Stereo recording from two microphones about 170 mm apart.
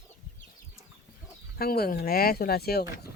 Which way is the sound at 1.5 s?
65° left (ahead or behind).